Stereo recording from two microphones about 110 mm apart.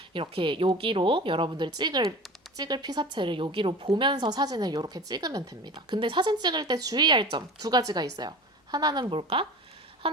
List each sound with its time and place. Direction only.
0.1 s a woman's voice: 50° right (ahead or behind); by 5.7 s 30° right (ahead or behind)
5.7 s speech: 50° right (ahead or behind)